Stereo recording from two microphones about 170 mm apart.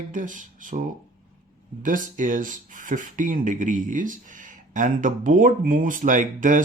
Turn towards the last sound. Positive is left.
turn(degrees=-50)  # may be behind; listen again after turning